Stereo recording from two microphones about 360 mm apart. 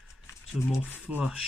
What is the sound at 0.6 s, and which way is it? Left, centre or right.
Speech, centre.